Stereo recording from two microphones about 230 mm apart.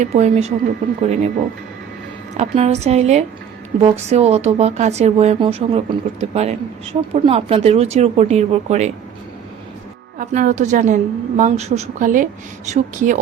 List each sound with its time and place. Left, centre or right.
0.0 s speech: right
2.4 s speech: right
10.2 s a woman's voice: right